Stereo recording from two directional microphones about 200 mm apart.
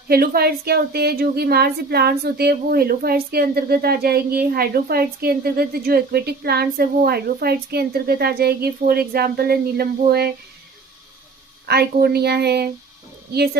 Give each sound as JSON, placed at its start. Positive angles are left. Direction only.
{"t": 0.1, "sound": "a woman's voice", "side_deg": -50}
{"t": 11.6, "sound": "a woman's voice", "side_deg": -50}